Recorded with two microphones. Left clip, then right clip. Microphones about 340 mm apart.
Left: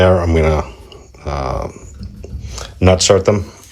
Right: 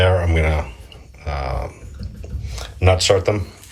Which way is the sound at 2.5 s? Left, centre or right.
Left.